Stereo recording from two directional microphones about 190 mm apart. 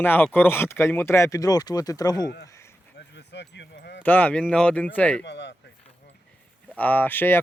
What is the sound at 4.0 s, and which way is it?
Speech, 10° left (ahead or behind).